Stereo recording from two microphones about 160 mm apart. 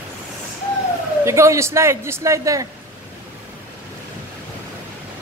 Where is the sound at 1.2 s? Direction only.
15° right (ahead or behind).